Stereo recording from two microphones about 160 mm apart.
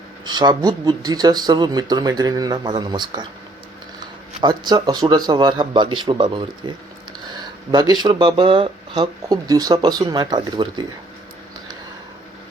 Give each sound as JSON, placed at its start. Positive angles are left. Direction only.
{"t": 0.3, "sound": "speech", "side_deg": -25}
{"t": 4.4, "sound": "speech", "side_deg": -25}